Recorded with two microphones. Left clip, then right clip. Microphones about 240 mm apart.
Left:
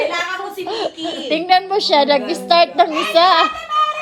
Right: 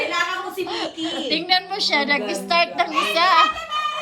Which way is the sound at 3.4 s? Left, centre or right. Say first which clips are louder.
Left 6 dB; centre.